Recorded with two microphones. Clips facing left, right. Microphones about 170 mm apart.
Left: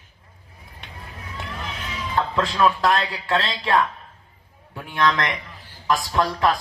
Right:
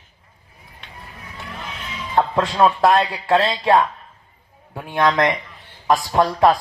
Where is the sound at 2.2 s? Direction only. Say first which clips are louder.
Right 4 dB; 30° right (ahead or behind).